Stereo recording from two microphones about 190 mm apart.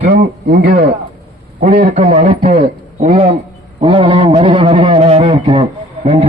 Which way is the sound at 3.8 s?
30° right (ahead or behind).